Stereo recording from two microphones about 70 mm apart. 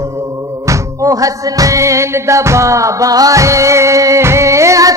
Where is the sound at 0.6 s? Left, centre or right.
Right.